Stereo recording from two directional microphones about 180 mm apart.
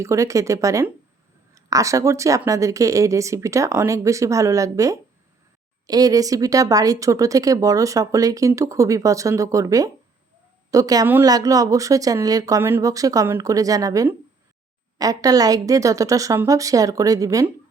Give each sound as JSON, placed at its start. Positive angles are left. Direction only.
{"t": 0.0, "sound": "speech", "side_deg": -15}